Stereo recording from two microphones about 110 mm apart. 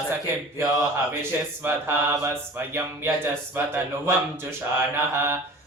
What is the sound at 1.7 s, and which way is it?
Mantra, 20° right (ahead or behind).